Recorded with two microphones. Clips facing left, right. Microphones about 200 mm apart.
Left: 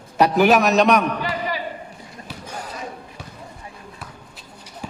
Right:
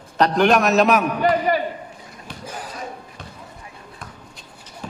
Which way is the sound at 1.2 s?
50° right (ahead or behind).